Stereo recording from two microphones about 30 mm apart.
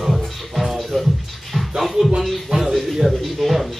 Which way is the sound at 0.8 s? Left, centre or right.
Centre.